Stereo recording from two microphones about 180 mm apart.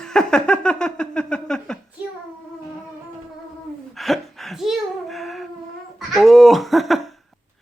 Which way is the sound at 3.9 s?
Centre (ahead or behind).